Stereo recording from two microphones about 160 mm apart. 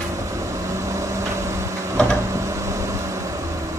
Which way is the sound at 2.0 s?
5° left (ahead or behind).